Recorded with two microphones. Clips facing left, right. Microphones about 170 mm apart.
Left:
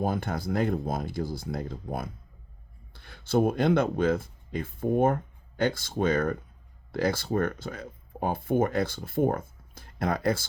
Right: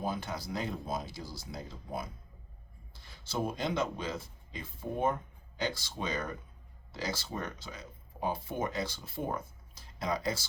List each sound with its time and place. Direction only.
0.0 s speech: 55° left (ahead or behind)